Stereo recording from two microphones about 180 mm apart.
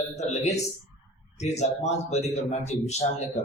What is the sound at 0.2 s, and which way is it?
Speech, 35° left (ahead or behind).